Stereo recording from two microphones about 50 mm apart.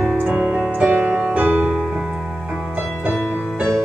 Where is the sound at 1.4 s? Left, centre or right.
Right.